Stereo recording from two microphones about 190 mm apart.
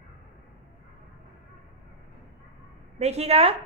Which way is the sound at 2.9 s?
35° right (ahead or behind).